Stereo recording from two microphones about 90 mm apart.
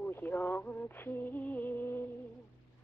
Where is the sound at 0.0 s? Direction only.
20° left (ahead or behind).